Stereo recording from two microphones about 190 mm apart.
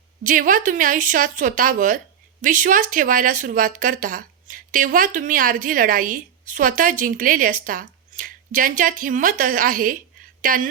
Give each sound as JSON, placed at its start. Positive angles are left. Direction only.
{"t": 0.2, "sound": "speech", "side_deg": -45}